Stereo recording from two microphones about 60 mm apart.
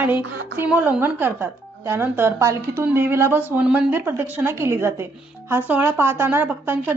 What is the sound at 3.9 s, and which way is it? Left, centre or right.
A woman's voice, right.